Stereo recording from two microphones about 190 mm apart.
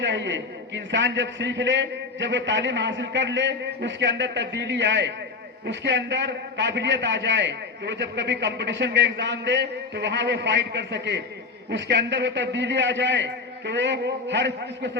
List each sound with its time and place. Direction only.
0.0 s a man's voice: 70° right (ahead or behind)